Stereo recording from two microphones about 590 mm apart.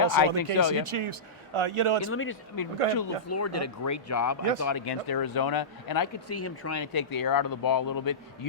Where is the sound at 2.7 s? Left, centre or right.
Right.